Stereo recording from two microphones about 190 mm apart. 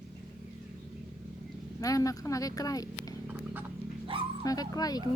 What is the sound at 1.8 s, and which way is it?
Speech, 20° left (ahead or behind).